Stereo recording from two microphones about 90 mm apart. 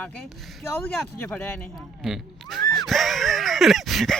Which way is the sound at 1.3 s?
25° left (ahead or behind).